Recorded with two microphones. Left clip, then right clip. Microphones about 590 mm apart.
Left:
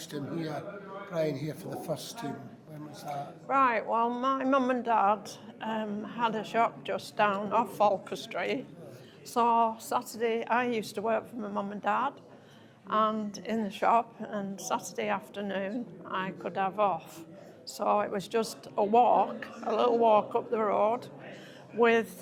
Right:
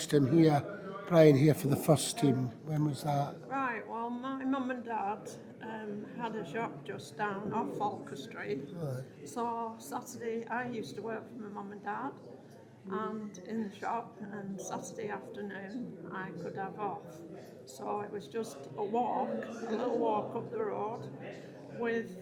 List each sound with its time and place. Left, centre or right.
0.0 s speech: right
3.5 s a woman's voice: left